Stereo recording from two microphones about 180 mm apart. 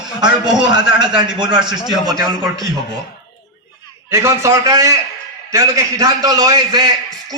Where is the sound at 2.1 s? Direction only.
20° right (ahead or behind).